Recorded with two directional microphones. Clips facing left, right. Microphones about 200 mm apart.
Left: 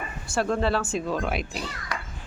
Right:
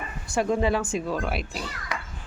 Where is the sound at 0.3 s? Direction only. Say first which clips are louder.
Right 1 dB; 15° right (ahead or behind).